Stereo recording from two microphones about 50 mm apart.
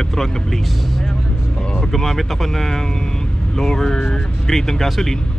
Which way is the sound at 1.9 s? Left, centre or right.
Centre.